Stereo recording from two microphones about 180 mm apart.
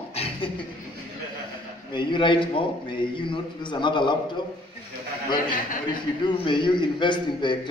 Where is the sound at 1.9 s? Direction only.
25° left (ahead or behind).